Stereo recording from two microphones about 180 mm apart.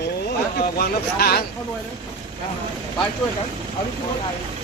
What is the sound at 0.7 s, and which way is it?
Speech, 55° left (ahead or behind).